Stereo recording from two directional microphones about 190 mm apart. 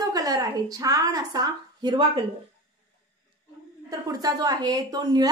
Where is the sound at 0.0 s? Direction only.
20° right (ahead or behind).